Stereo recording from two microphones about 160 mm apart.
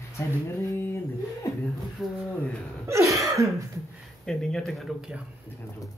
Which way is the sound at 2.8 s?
20° right (ahead or behind).